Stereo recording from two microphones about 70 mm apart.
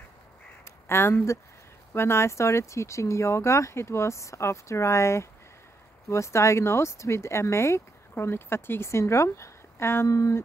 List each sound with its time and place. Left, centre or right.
0.7 s speech: left